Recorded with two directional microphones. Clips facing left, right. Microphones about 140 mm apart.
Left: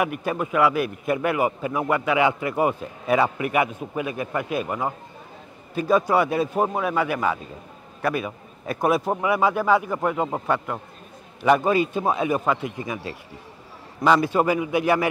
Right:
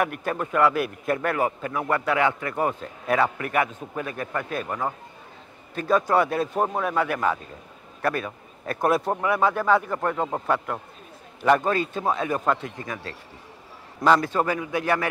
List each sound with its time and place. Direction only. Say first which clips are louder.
0.0 s speech: left 1 dB; 5° left (ahead or behind)